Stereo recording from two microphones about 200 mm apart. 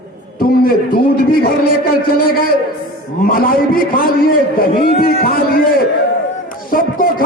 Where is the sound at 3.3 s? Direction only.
45° left (ahead or behind).